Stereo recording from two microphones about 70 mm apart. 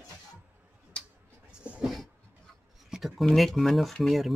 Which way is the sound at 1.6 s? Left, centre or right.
Centre.